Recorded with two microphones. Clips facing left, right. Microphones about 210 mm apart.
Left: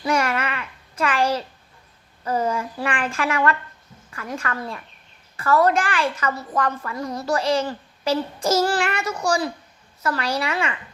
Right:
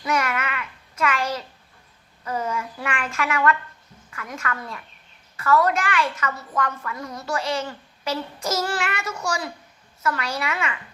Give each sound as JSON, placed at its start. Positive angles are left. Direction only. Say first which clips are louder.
{"t": 0.0, "sound": "child singing", "louder": "left 3 dB", "side_deg": 30}
{"t": 2.2, "sound": "a woman's voice", "louder": "left 4 dB", "side_deg": 35}